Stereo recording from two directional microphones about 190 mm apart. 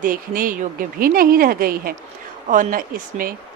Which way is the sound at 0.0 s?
45° right (ahead or behind).